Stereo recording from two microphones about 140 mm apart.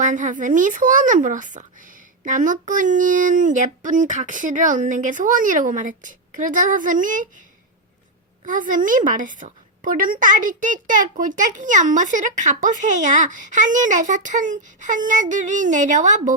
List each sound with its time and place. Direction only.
0.0 s speech: 65° right (ahead or behind)
8.4 s a woman's voice: 70° right (ahead or behind)